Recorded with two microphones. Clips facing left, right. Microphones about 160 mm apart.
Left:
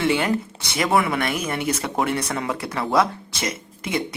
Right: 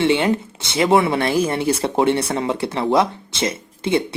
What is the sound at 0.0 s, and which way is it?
Speech, 25° right (ahead or behind).